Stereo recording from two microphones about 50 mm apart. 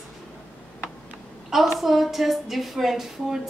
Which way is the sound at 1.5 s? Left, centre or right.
Centre.